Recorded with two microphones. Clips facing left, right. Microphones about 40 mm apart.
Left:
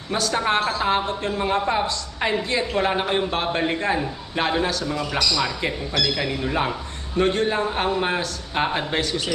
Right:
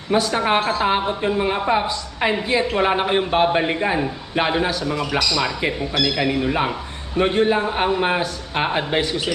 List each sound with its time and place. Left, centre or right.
0.1 s a woman's voice: centre